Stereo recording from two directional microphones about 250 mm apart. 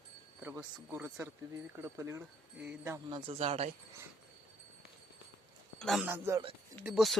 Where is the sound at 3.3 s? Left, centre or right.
Right.